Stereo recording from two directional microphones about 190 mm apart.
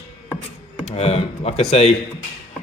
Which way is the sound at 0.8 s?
35° left (ahead or behind).